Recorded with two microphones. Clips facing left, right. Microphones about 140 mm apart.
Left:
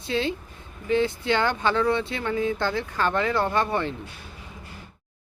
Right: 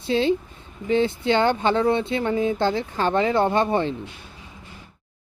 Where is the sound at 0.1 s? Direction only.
25° right (ahead or behind).